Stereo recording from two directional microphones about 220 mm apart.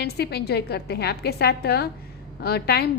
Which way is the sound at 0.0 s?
50° left (ahead or behind).